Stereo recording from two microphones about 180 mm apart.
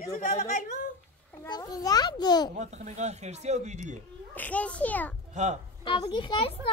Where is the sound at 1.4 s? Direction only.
20° left (ahead or behind).